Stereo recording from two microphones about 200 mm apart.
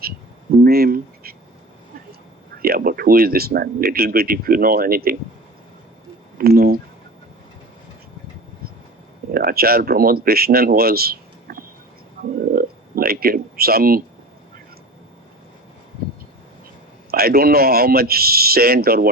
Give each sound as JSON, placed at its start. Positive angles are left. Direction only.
{"t": 0.6, "sound": "duck", "side_deg": -50}
{"t": 2.6, "sound": "speech", "side_deg": -45}
{"t": 6.4, "sound": "speech", "side_deg": -50}
{"t": 9.3, "sound": "speech", "side_deg": -50}
{"t": 12.5, "sound": "a sound", "side_deg": -50}
{"t": 16.0, "sound": "a sound", "side_deg": -50}
{"t": 17.1, "sound": "speech", "side_deg": -50}